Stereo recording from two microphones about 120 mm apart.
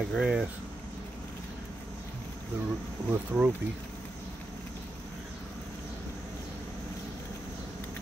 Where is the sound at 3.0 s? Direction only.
15° right (ahead or behind).